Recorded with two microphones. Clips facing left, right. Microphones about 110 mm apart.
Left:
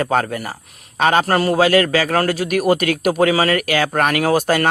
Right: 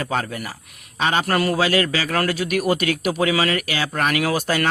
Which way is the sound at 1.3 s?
30° left (ahead or behind).